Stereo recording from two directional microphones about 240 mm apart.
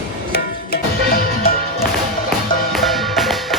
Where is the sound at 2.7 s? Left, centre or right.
Centre.